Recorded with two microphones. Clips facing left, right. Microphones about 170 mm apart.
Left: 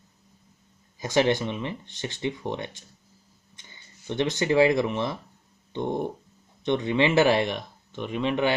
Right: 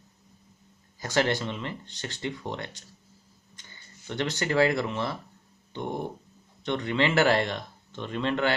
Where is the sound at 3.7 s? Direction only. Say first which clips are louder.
Left 5 dB; 20° left (ahead or behind).